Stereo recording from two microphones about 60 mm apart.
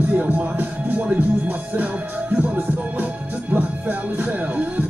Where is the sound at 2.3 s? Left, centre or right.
Right.